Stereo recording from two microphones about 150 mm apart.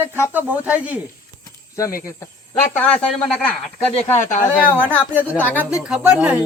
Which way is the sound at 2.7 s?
10° left (ahead or behind).